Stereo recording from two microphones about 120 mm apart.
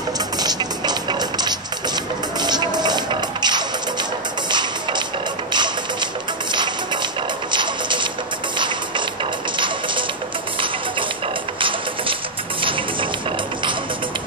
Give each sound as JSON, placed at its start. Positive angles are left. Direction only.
{"t": 0.4, "sound": "music", "side_deg": -35}
{"t": 6.5, "sound": "music", "side_deg": -40}
{"t": 12.6, "sound": "music", "side_deg": -45}